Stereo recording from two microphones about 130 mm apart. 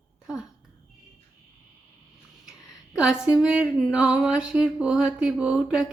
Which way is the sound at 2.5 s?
5° right (ahead or behind).